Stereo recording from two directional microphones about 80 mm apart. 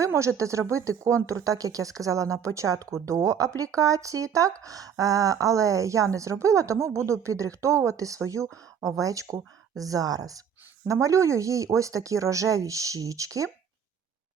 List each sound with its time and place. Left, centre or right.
0.0 s a woman's voice: right